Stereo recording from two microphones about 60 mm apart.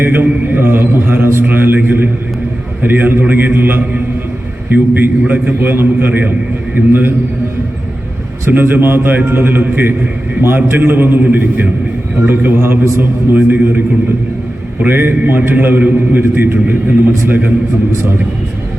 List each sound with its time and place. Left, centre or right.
0.0 s a man's voice: right
8.4 s a man's voice: right